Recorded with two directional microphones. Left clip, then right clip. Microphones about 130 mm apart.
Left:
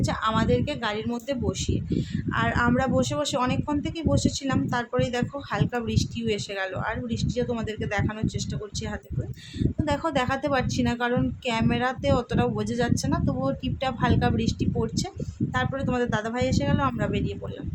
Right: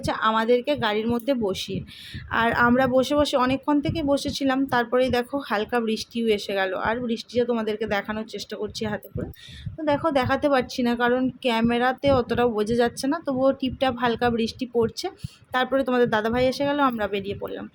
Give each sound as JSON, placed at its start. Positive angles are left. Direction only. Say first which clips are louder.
{"t": 0.0, "sound": "speech", "louder": "right 3 dB", "side_deg": -35}
{"t": 9.8, "sound": "speech", "louder": "right 4 dB", "side_deg": -25}